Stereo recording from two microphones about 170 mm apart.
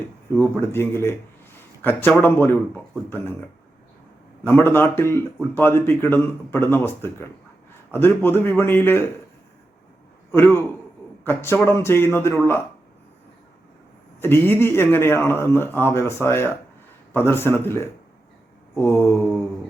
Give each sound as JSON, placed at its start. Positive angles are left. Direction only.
{"t": 0.4, "sound": "a man's voice", "side_deg": 15}
{"t": 4.4, "sound": "a man's voice", "side_deg": 15}
{"t": 10.3, "sound": "a man's voice", "side_deg": 15}
{"t": 14.2, "sound": "a man's voice", "side_deg": 15}